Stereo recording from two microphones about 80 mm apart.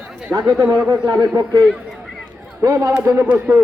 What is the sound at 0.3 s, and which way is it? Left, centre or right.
Speech, right.